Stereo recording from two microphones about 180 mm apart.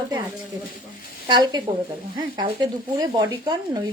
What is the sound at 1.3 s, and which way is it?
Speech, 25° right (ahead or behind).